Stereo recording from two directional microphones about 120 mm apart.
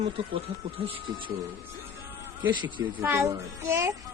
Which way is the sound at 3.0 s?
20° right (ahead or behind).